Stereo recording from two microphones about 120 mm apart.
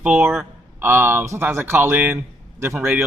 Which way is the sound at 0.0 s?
10° right (ahead or behind).